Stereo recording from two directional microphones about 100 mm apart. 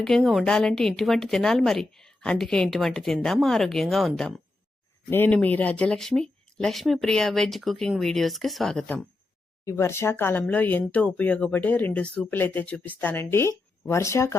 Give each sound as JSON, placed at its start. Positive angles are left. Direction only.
{"t": 0.0, "sound": "a woman's voice", "side_deg": 5}
{"t": 5.1, "sound": "a woman's voice", "side_deg": 15}
{"t": 9.6, "sound": "a woman's voice", "side_deg": 25}